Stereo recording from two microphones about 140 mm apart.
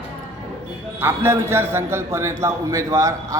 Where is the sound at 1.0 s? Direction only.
15° right (ahead or behind).